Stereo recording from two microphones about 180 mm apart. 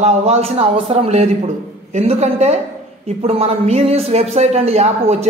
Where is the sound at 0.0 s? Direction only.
35° right (ahead or behind).